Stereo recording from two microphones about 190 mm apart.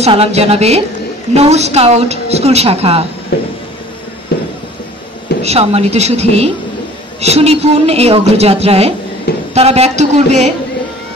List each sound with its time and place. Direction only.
0.0 s a woman's voice: 35° right (ahead or behind)
3.3 s a sound: 55° left (ahead or behind)
5.4 s a woman's voice: 35° right (ahead or behind)